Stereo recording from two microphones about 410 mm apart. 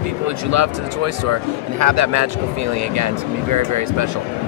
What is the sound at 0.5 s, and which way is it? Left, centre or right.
Speech, right.